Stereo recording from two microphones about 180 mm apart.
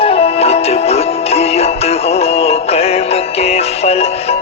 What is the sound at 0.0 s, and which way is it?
Music, 35° left (ahead or behind).